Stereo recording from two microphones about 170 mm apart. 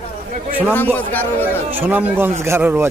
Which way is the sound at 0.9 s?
10° left (ahead or behind).